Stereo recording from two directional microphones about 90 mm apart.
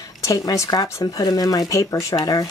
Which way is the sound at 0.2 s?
35° left (ahead or behind).